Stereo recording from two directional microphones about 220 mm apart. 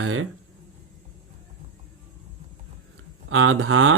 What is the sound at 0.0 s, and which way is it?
Speech, 70° right (ahead or behind).